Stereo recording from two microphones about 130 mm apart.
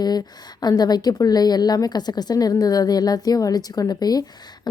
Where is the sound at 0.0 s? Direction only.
30° left (ahead or behind).